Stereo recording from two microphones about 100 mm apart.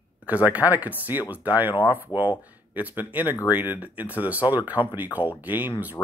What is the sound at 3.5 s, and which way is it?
Speech, 15° right (ahead or behind).